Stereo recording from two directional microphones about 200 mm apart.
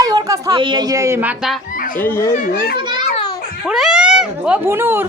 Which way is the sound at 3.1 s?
25° left (ahead or behind).